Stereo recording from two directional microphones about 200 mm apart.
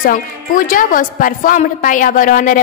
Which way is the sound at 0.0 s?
45° left (ahead or behind).